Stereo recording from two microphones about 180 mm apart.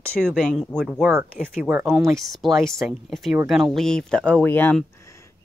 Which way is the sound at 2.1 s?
Centre (ahead or behind).